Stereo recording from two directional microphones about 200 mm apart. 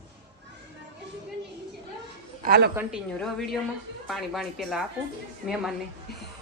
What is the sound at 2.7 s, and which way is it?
Speech, 10° right (ahead or behind).